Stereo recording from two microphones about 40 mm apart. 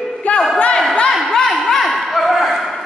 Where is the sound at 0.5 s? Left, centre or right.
Left.